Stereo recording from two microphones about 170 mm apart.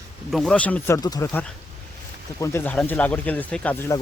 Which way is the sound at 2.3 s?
15° left (ahead or behind).